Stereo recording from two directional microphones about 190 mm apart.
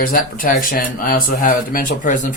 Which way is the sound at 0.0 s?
50° left (ahead or behind).